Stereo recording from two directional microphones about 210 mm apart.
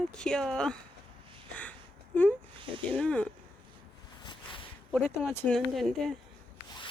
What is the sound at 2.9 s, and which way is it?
Speech, 5° left (ahead or behind).